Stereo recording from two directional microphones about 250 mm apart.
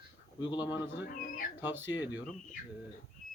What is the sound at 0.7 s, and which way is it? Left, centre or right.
Speech, centre.